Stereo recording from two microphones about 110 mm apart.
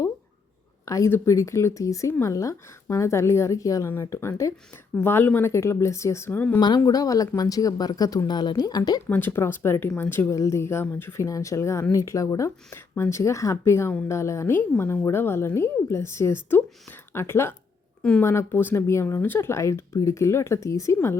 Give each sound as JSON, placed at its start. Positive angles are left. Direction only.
{"t": 0.9, "sound": "a woman's voice", "side_deg": 30}
{"t": 6.6, "sound": "speech", "side_deg": 40}
{"t": 9.0, "sound": "a woman's voice", "side_deg": 20}